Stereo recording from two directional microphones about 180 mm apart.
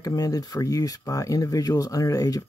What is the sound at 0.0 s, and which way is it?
Speech, 20° left (ahead or behind).